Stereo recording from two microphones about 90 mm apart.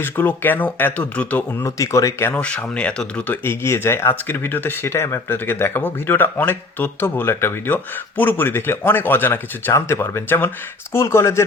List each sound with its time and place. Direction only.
0.0 s speech: 20° left (ahead or behind)
1.6 s speech: 35° left (ahead or behind)
2.4 s speech: 15° left (ahead or behind)
3.4 s speech: 30° left (ahead or behind)